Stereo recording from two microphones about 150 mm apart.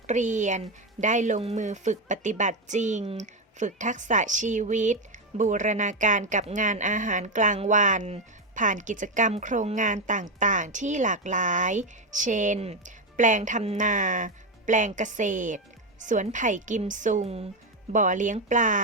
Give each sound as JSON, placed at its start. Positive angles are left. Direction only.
{"t": 0.1, "sound": "speech", "side_deg": -55}
{"t": 17.9, "sound": "speech", "side_deg": -55}